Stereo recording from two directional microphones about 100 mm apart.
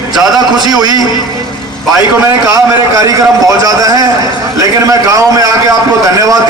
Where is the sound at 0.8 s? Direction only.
40° right (ahead or behind).